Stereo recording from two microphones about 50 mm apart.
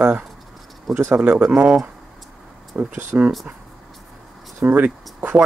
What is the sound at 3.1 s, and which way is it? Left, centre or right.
Speech, right.